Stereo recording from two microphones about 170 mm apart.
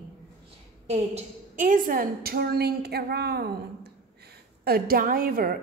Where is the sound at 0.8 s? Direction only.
40° right (ahead or behind).